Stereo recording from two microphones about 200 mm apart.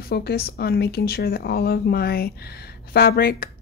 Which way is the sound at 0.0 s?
50° left (ahead or behind).